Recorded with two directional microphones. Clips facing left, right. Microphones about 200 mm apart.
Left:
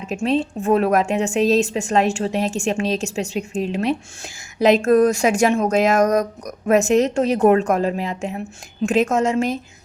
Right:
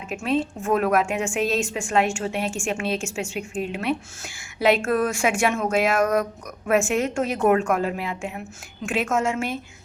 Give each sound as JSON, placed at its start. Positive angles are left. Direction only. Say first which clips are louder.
{"t": 0.1, "sound": "a woman's voice", "louder": "left 4 dB", "side_deg": 35}